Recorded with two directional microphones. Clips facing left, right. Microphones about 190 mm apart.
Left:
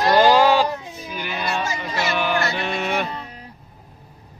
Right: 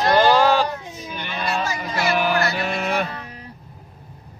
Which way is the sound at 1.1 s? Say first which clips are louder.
Even; 5° left (ahead or behind).